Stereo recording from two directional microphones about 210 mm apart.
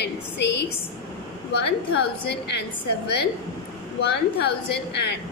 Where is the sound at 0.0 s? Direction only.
55° left (ahead or behind).